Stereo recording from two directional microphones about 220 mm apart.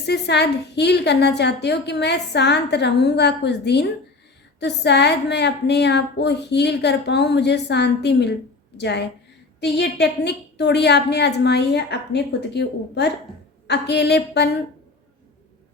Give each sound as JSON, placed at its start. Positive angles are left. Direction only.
{"t": 0.0, "sound": "a woman's voice", "side_deg": 50}